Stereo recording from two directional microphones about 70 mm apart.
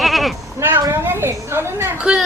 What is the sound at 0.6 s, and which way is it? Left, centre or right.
A woman's voice, right.